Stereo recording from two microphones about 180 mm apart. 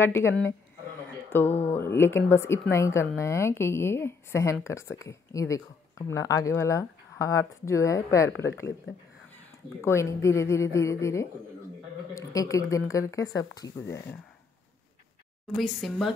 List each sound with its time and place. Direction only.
0.0 s speech: 15° left (ahead or behind)
9.8 s speech: 15° left (ahead or behind)
15.5 s speech: centre (ahead or behind)